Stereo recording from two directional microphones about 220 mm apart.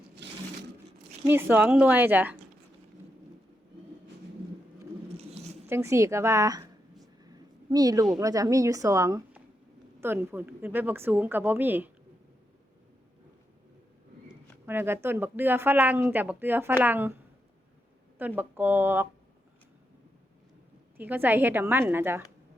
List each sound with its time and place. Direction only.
0.2 s a sound: 55° right (ahead or behind)
1.3 s speech: 10° right (ahead or behind)
5.6 s speech: 10° right (ahead or behind)
7.3 s a sound: 15° right (ahead or behind)
8.1 s speech: 15° right (ahead or behind)
14.7 s speech: 10° right (ahead or behind)
18.2 s speech: 10° right (ahead or behind)
21.0 s speech: 10° right (ahead or behind)